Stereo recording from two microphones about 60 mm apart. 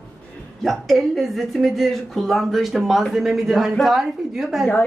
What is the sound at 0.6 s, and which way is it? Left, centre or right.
A woman's voice, centre.